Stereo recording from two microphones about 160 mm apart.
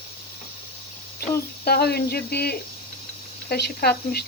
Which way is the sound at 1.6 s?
80° left.